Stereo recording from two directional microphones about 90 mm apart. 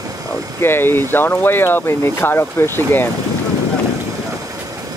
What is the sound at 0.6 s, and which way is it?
Speech, 25° left (ahead or behind).